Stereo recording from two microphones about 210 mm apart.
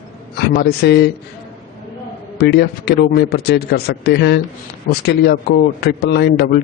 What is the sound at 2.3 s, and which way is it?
A man's voice, 50° left (ahead or behind).